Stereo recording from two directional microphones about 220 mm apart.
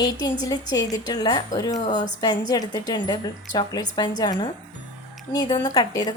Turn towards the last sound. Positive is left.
turn(degrees=20)  # may be behind; listen again after turning